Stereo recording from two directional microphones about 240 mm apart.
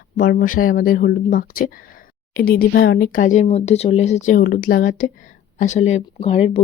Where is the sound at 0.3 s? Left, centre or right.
Left.